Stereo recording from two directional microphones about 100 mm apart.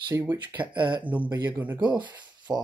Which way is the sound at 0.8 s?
50° right (ahead or behind).